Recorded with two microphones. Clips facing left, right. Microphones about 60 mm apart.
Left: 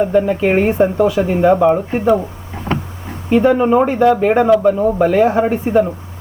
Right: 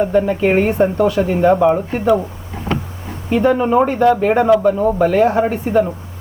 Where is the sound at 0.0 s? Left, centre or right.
Centre.